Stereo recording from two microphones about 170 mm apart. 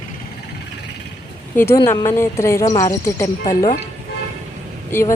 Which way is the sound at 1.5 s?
15° left (ahead or behind).